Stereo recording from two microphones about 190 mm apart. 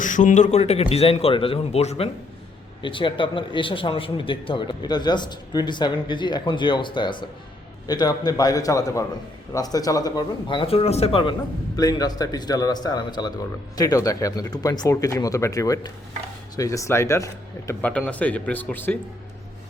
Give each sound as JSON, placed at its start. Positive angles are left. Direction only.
{"t": 0.0, "sound": "a man's voice", "side_deg": 40}